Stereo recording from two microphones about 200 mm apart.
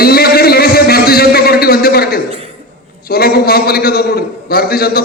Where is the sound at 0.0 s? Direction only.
50° left (ahead or behind).